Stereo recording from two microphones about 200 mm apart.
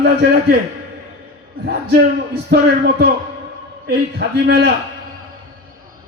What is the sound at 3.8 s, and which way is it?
Speech, 50° right (ahead or behind).